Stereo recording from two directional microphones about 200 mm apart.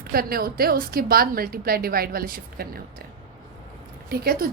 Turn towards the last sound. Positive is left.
turn(degrees=-50)  # may be behind; listen again after turning